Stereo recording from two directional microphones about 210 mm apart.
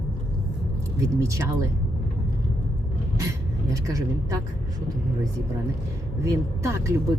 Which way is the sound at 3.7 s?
15° right (ahead or behind).